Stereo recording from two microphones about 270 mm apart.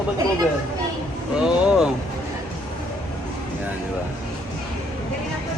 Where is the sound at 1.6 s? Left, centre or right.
Centre.